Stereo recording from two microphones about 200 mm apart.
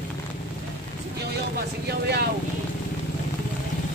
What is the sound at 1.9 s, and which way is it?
Speech, 55° right (ahead or behind).